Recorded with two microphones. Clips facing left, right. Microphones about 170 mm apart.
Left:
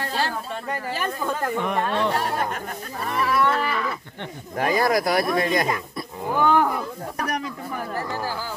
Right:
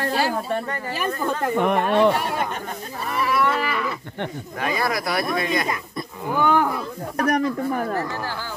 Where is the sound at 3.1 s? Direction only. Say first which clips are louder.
Even; 5° right (ahead or behind).